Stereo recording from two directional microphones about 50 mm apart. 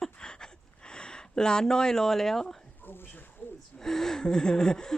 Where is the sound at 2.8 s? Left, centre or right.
Left.